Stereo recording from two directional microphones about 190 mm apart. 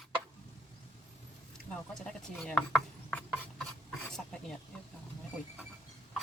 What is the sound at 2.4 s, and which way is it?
Speech, centre (ahead or behind).